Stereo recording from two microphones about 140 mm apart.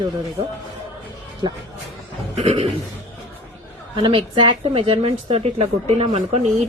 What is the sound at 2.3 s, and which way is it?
Speech, 45° right (ahead or behind).